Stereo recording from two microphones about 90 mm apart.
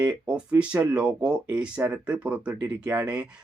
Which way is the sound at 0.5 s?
15° right (ahead or behind).